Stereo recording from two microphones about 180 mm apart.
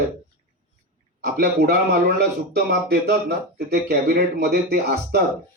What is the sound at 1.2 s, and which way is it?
Speech, 60° right (ahead or behind).